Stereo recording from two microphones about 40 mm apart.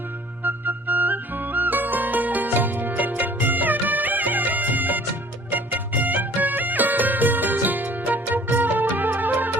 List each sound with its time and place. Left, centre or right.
0.4 s music: right